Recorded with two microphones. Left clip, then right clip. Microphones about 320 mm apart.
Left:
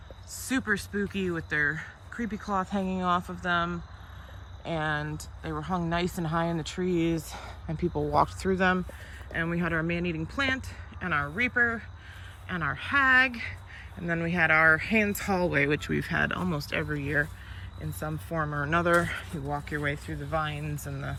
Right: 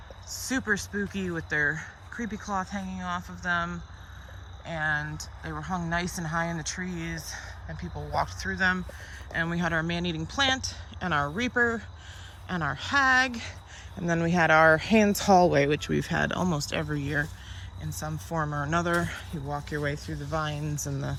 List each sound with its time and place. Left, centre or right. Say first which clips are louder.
0.3 s speech: right 1 dB; centre
2.8 s speech: left 6 dB; centre
3.2 s speech: left 1 dB; centre
4.9 s speech: right 2 dB; centre
6.8 s speech: left 9 dB; centre
8.4 s speech: left 4 dB; left
9.3 s speech: right 1 dB; centre